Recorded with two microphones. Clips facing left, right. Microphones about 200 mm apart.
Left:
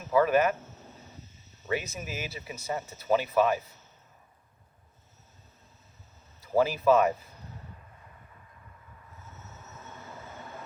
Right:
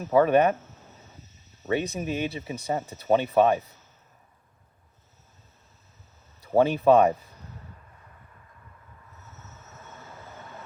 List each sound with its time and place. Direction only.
0.1 s speech: 30° right (ahead or behind)
1.6 s speech: 30° right (ahead or behind)
6.6 s speech: 30° right (ahead or behind)